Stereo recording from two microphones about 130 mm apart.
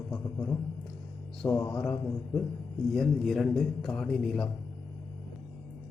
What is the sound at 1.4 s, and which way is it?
Mantra, 20° left (ahead or behind).